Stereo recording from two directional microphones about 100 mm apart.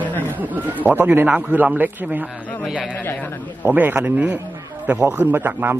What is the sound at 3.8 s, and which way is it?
Speech, 20° right (ahead or behind).